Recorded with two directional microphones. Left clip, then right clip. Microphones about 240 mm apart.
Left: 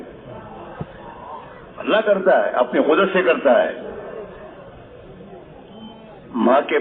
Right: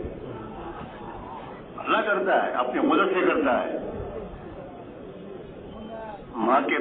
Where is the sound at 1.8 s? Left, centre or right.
Left.